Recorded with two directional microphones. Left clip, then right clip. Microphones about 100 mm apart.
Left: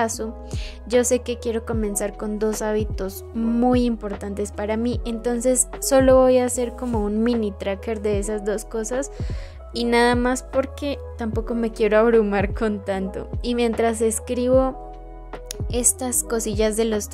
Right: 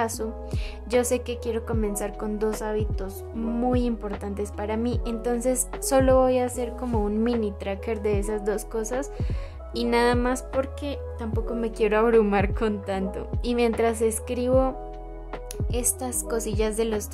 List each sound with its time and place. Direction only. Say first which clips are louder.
0.0 s a woman's voice: left 3 dB; 30° left (ahead or behind)
2.6 s a woman's voice: left 5 dB; 45° left (ahead or behind); by 9.1 s 25° left (ahead or behind)
9.8 s a woman's voice: left 4 dB; 40° left (ahead or behind)
10.8 s speech: left 5 dB; 55° left (ahead or behind)
11.8 s a woman's voice: left 3 dB; 25° left (ahead or behind)